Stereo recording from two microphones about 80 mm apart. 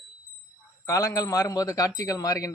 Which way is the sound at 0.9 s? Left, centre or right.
Left.